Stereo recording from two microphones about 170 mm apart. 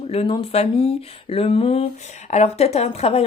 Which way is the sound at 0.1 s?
30° left (ahead or behind).